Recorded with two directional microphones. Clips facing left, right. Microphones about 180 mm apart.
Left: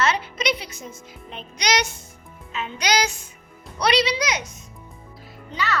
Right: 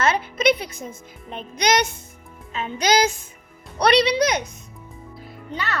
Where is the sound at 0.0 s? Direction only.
50° right (ahead or behind).